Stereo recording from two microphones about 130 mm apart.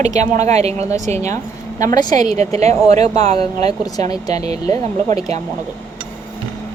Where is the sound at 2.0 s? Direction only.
30° left (ahead or behind).